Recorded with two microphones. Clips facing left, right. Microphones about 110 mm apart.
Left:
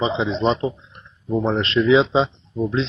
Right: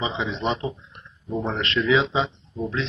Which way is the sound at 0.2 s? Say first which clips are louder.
Left 6 dB; 30° left (ahead or behind).